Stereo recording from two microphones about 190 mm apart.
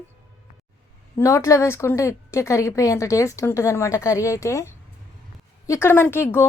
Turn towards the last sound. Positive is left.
turn(degrees=10)  # may be behind; listen again after turning